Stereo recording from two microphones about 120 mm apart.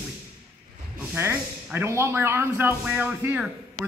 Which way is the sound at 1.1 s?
20° right (ahead or behind).